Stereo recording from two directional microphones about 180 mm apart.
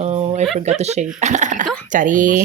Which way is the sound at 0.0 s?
35° right (ahead or behind).